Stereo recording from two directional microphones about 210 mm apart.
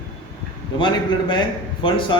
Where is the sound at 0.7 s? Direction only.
20° left (ahead or behind).